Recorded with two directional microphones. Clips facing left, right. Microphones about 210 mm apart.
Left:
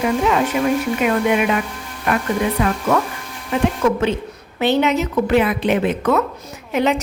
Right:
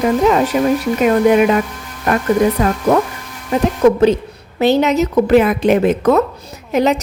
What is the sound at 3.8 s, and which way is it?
A woman's voice, 35° right (ahead or behind).